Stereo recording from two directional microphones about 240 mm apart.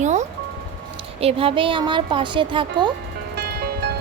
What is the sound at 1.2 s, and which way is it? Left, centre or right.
A woman's voice, right.